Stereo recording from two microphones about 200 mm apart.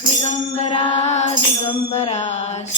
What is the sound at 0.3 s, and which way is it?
Mantra, 35° left (ahead or behind).